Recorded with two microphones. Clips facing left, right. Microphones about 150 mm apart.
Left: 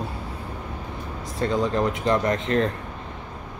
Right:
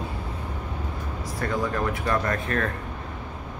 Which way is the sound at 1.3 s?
20° left (ahead or behind).